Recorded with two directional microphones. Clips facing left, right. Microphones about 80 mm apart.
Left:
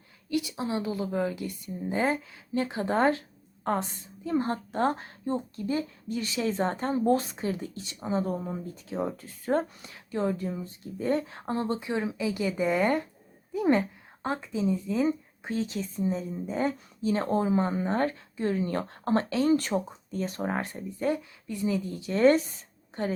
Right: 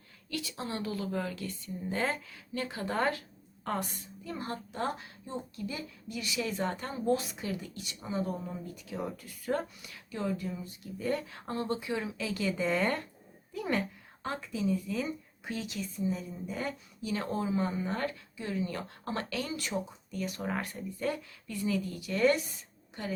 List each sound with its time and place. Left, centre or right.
0.3 s a woman's voice: centre; by 23.1 s left